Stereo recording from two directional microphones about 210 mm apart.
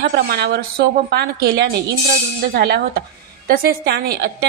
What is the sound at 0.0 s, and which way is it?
A woman's voice, 50° right (ahead or behind).